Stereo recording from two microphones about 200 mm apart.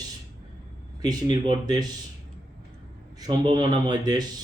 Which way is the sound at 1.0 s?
20° right (ahead or behind).